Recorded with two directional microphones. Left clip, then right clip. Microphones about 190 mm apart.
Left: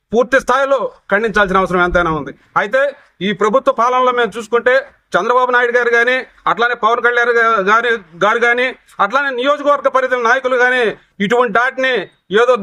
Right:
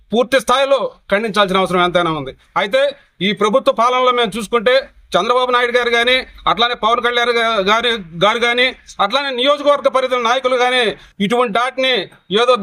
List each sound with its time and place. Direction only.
0.1 s a man's voice: 10° left (ahead or behind)